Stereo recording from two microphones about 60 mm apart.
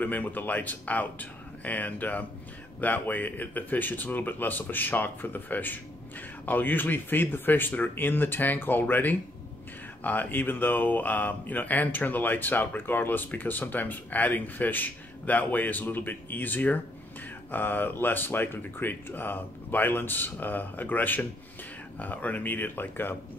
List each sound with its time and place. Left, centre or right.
0.0 s speech: left